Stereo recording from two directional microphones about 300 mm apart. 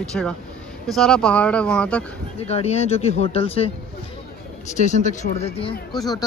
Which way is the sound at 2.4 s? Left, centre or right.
Left.